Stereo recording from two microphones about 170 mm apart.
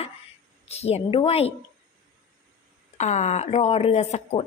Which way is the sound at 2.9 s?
40° left (ahead or behind).